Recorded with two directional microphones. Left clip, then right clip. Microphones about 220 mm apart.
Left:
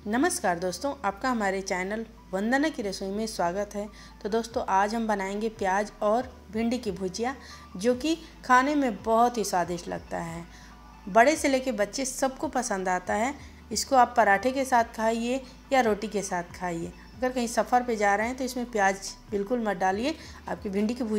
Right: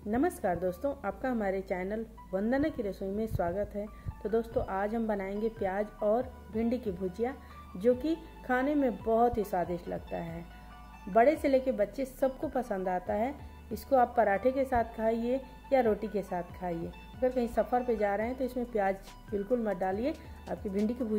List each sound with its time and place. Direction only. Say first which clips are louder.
0.1 s a woman's voice: left 4 dB; 5° left (ahead or behind)